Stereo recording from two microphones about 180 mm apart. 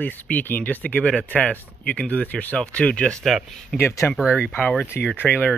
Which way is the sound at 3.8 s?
15° left (ahead or behind).